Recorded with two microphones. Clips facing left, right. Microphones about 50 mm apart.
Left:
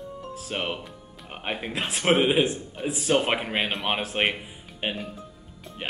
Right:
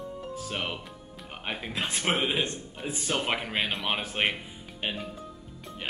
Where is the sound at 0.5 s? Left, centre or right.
Centre.